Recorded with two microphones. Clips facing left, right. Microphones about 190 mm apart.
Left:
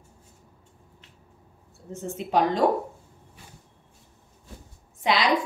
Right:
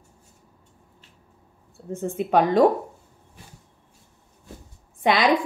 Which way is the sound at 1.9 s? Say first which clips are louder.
Right 6 dB; 55° right (ahead or behind).